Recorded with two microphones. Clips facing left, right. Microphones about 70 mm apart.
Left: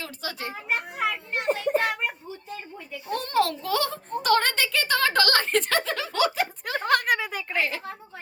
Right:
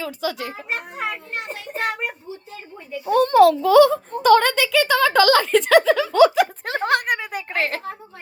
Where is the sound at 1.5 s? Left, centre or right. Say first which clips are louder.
Left 9 dB; left.